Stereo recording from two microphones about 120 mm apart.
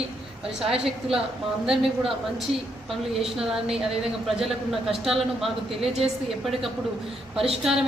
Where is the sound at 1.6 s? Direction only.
Centre (ahead or behind).